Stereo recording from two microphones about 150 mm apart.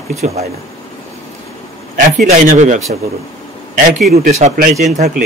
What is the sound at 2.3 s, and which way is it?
Speech, 55° right (ahead or behind).